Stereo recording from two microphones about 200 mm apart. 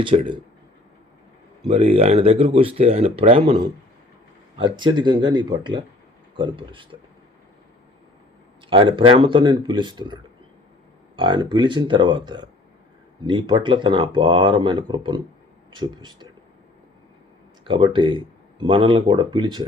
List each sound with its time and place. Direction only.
0.0 s speech: 25° right (ahead or behind)
1.6 s speech: 30° right (ahead or behind)
8.7 s speech: 25° right (ahead or behind)
11.2 s speech: 25° right (ahead or behind)
17.7 s speech: 25° right (ahead or behind)